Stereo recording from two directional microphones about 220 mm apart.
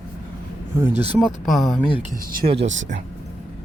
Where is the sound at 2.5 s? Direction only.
55° right (ahead or behind).